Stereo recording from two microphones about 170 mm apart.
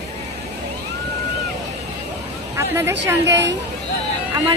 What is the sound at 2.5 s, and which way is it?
Speech, 15° right (ahead or behind).